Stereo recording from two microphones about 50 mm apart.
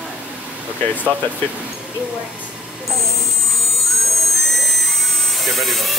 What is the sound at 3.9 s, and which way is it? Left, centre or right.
Jet engine, centre.